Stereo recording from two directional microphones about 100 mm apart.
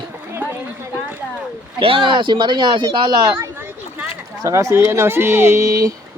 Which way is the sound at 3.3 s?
25° right (ahead or behind).